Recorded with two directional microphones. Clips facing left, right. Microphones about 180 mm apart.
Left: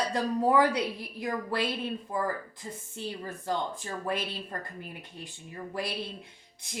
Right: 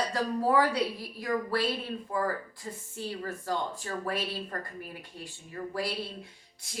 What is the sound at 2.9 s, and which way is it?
Speech, 20° left (ahead or behind).